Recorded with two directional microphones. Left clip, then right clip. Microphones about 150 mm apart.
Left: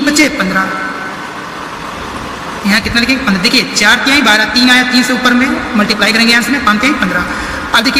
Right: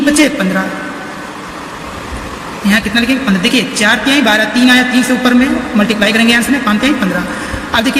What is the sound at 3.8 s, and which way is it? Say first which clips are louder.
A man's voice: left 2 dB; 45° right (ahead or behind).